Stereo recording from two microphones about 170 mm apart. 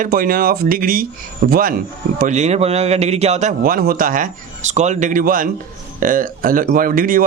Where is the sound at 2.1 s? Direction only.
45° right (ahead or behind).